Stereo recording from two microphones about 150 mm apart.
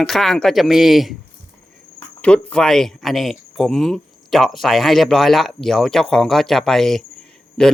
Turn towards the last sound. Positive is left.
turn(degrees=5)  # may be behind; listen again after turning